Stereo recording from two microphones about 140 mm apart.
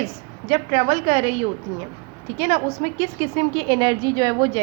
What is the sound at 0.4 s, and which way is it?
A woman's voice, 50° right (ahead or behind).